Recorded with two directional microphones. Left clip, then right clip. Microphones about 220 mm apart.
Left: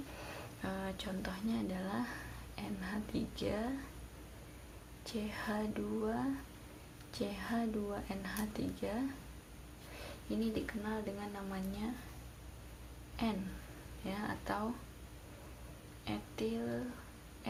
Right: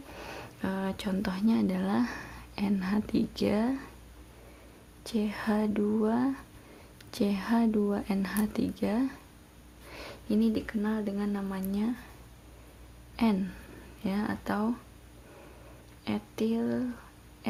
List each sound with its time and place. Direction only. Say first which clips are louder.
0.2 s whispering: right 9 dB; 45° right (ahead or behind)
2.6 s speech: right 11 dB; 45° right (ahead or behind)
5.0 s speech: right 9 dB; 45° right (ahead or behind)
13.2 s speech: right 10 dB; 45° right (ahead or behind)
16.0 s speech: right 8 dB; 45° right (ahead or behind)